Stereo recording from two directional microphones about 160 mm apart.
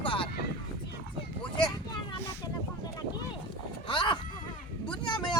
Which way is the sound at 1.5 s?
25° left (ahead or behind).